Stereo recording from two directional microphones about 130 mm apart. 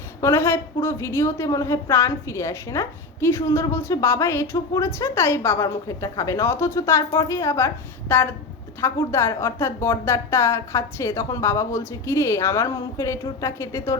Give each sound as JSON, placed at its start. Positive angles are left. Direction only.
{"t": 0.2, "sound": "a woman's voice", "side_deg": 20}